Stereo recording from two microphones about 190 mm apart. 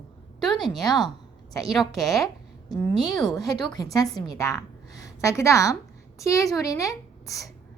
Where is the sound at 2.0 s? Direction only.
Centre (ahead or behind).